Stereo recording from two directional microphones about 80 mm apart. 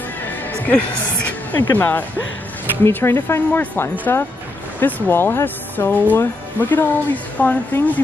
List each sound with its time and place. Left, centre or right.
0.5 s a woman's voice: centre